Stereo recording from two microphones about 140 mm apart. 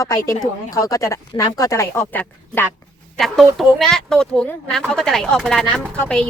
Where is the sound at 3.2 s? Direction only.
Centre (ahead or behind).